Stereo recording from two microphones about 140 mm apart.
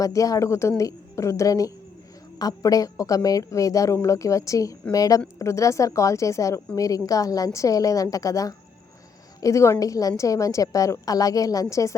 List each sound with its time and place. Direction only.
0.0 s a woman's voice: 25° left (ahead or behind)